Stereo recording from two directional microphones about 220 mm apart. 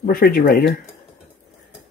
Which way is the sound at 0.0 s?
40° left (ahead or behind).